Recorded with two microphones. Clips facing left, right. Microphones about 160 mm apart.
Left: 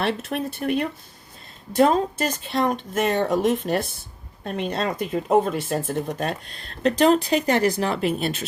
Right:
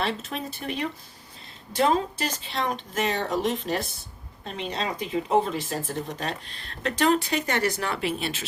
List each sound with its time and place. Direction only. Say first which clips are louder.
0.0 s speech: left 4 dB; 60° left (ahead or behind)